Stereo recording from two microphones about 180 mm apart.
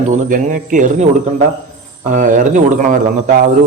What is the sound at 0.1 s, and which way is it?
Speech, 45° right (ahead or behind).